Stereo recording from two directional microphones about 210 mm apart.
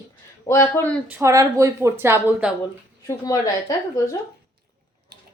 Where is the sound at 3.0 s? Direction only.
15° left (ahead or behind).